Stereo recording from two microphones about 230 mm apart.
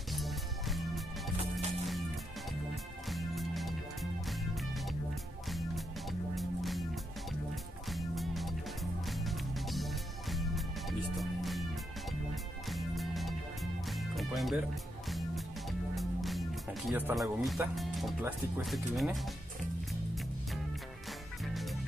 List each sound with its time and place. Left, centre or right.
0.1 s music: centre
2.7 s music: centre
6.3 s music: centre
7.9 s music: centre
12.6 s music: centre
18.2 s speech: centre